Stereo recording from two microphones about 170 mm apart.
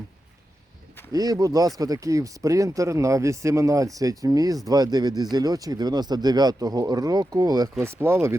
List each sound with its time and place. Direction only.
1.1 s speech: 20° right (ahead or behind)